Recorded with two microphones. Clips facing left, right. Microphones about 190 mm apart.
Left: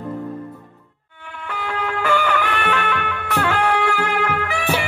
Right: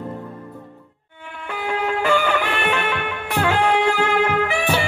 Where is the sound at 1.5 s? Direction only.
20° right (ahead or behind).